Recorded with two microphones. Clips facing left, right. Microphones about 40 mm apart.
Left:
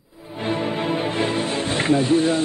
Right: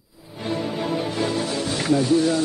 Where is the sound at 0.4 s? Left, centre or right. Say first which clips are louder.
Left 2 dB; left.